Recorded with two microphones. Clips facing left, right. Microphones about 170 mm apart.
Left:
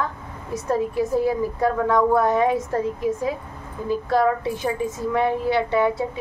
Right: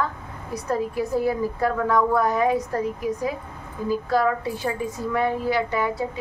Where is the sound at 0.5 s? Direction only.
20° left (ahead or behind).